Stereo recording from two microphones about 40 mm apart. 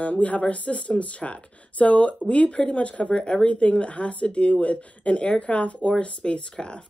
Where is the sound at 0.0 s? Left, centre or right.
Left.